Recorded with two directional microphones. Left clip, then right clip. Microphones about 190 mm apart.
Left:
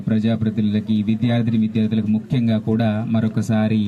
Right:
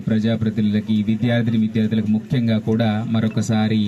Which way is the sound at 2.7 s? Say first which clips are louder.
Even; 20° right (ahead or behind).